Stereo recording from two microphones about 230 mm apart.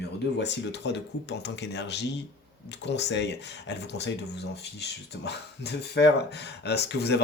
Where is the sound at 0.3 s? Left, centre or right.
Left.